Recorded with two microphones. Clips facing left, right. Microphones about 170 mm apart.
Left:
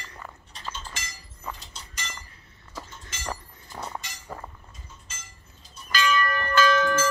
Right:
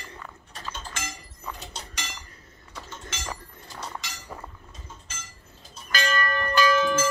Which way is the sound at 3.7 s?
90° right.